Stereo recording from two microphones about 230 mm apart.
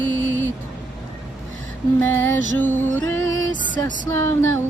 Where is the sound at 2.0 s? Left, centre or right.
Centre.